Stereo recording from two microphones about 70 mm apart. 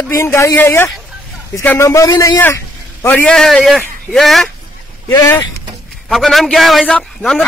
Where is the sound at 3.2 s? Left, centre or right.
Centre.